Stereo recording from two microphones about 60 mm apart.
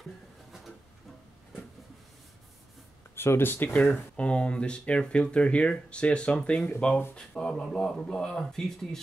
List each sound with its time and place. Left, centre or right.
3.2 s speech: left
3.9 s speech: centre